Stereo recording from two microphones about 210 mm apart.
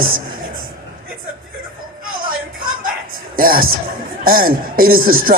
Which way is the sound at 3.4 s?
45° right (ahead or behind).